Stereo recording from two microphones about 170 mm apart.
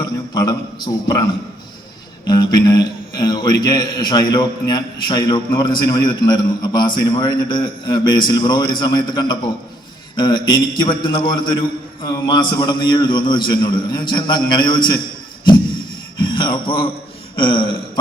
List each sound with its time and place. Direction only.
0.0 s a man's voice: 20° left (ahead or behind)
2.2 s a man's voice: 25° left (ahead or behind)
16.1 s a man's voice: 25° left (ahead or behind)
17.3 s a sound: 30° left (ahead or behind)